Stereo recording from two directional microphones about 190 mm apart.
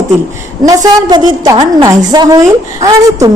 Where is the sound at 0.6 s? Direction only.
20° right (ahead or behind).